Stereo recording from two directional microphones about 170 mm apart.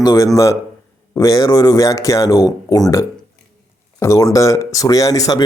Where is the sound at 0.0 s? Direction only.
20° left (ahead or behind).